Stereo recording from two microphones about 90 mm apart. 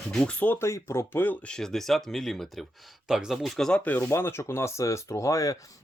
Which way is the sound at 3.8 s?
20° left (ahead or behind).